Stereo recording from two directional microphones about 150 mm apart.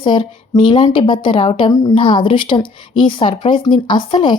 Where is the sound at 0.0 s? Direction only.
35° left (ahead or behind).